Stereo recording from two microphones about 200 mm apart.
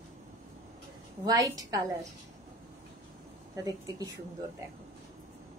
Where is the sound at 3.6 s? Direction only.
20° right (ahead or behind).